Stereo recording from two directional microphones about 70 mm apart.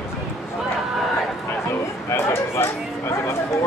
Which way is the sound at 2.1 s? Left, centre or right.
Left.